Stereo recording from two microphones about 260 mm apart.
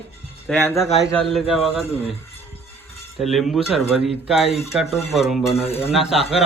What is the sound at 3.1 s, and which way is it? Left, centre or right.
Cutlery, centre.